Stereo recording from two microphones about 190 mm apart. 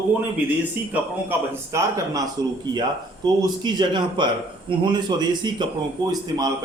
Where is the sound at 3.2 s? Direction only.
20° right (ahead or behind).